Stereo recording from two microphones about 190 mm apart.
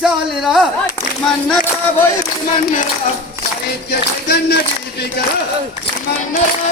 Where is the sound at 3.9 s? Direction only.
55° left (ahead or behind).